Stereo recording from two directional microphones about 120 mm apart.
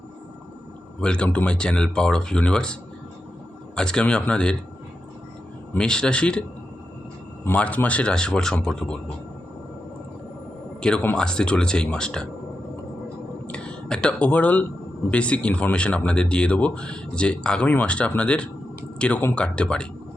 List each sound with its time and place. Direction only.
1.0 s a man's voice: 10° left (ahead or behind)
3.8 s a man's voice: 5° left (ahead or behind)
5.7 s a man's voice: 5° left (ahead or behind)
7.4 s a man's voice: 10° left (ahead or behind)
10.8 s a man's voice: 5° left (ahead or behind)
13.5 s a man's voice: 10° left (ahead or behind)